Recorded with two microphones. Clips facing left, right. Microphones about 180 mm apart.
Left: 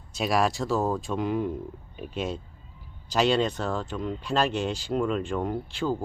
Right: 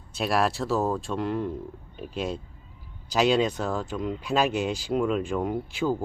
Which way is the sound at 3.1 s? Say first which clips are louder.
Right 1 dB; 5° right (ahead or behind).